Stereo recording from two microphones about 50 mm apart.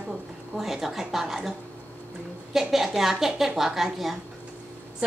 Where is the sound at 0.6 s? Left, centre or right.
Centre.